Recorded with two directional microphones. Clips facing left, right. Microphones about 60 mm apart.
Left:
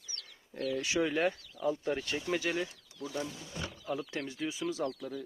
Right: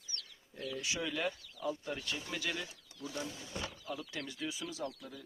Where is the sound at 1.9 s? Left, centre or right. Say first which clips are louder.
Left 7 dB; left.